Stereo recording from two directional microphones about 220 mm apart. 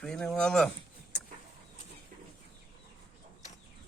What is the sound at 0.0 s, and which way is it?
Speech, 5° left (ahead or behind).